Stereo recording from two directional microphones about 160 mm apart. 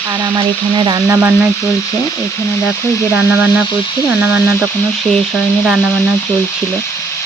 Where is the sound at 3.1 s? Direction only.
10° right (ahead or behind).